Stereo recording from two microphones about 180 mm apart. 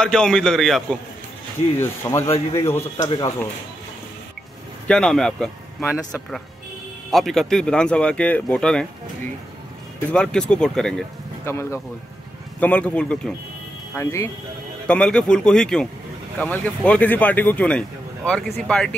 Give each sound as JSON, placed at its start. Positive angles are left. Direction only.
{"t": 0.0, "sound": "speech", "side_deg": 5}
{"t": 1.8, "sound": "a man's voice", "side_deg": 15}
{"t": 4.8, "sound": "speech", "side_deg": 5}
{"t": 7.1, "sound": "speech", "side_deg": 0}
{"t": 10.1, "sound": "speech", "side_deg": 5}
{"t": 11.4, "sound": "speech", "side_deg": 15}